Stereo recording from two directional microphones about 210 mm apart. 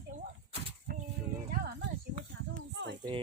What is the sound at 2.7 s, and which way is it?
Speech, 55° right (ahead or behind).